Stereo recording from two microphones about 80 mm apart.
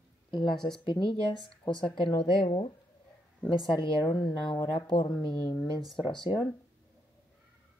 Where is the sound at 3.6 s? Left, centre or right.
Left.